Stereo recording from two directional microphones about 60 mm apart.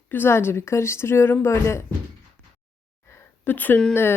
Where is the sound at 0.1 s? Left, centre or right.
Left.